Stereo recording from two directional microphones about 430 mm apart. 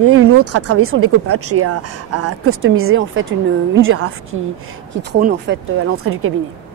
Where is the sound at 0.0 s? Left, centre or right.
Right.